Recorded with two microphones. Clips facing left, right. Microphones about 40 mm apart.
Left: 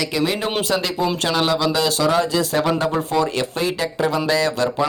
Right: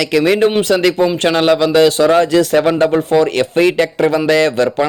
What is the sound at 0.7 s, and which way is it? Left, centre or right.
Speech, right.